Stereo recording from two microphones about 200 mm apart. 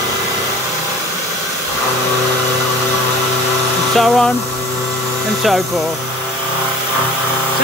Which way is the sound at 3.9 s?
Centre (ahead or behind).